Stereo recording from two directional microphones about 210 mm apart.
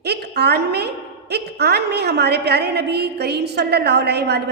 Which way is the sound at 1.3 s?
50° right (ahead or behind).